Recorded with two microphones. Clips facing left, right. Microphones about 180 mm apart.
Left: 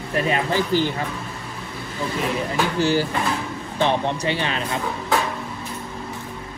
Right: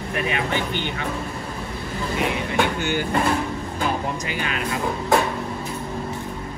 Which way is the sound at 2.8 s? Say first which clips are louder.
Left 5 dB; 35° left (ahead or behind).